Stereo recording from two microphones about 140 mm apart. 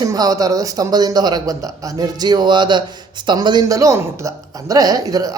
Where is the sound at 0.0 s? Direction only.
25° right (ahead or behind).